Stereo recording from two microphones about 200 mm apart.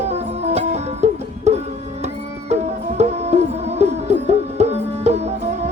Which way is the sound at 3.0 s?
30° right (ahead or behind).